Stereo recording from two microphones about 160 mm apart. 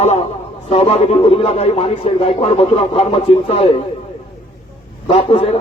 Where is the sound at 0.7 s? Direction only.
40° left (ahead or behind).